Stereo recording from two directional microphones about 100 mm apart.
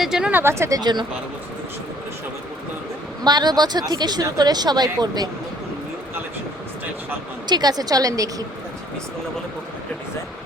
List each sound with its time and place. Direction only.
0.0 s speech: 5° right (ahead or behind)
0.3 s speech: 25° right (ahead or behind)
0.8 s speech: 45° right (ahead or behind)
3.2 s speech: 45° right (ahead or behind)
7.4 s a woman's voice: 45° right (ahead or behind)